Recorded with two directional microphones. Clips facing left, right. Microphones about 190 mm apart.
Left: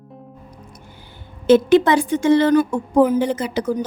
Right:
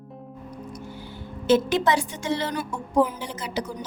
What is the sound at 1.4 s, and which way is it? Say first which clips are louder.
A woman's voice: left 7 dB; 55° left (ahead or behind).